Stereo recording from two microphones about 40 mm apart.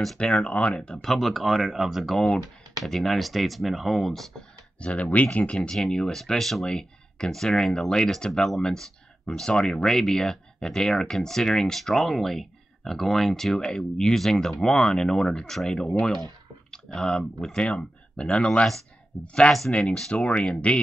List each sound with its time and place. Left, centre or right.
0.2 s speech: left
1.0 s speech: centre
2.1 s speech: centre
4.8 s speech: left
5.7 s speech: centre
6.7 s speech: left
14.1 s speech: centre
17.6 s speech: left